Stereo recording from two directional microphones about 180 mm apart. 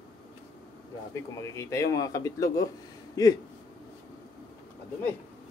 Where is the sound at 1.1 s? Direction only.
15° left (ahead or behind).